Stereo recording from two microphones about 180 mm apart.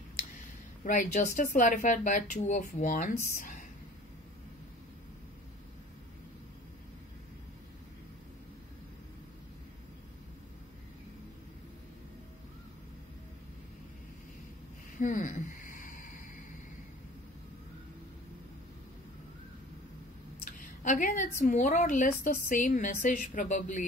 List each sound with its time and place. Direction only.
0.8 s a woman's voice: 45° left (ahead or behind)
15.0 s a sound: 45° left (ahead or behind)
20.4 s a woman's voice: 45° left (ahead or behind)